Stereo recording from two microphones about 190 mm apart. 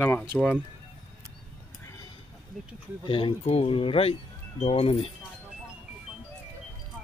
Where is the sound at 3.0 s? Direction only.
25° left (ahead or behind).